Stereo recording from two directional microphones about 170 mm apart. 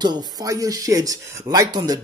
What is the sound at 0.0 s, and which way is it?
Speech, 25° right (ahead or behind).